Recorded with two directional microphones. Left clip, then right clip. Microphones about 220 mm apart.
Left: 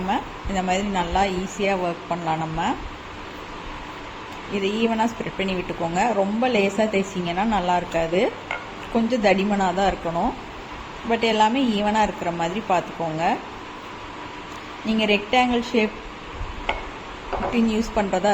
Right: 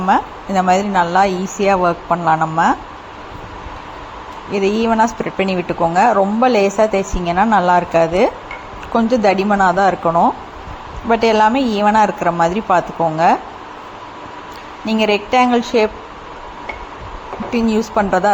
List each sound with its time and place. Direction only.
0.1 s a woman's voice: 15° right (ahead or behind)
4.5 s a woman's voice: 20° right (ahead or behind)
14.8 s a woman's voice: 20° right (ahead or behind)
17.5 s a woman's voice: 20° right (ahead or behind)